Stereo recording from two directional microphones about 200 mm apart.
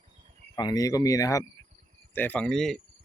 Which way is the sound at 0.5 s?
20° left (ahead or behind).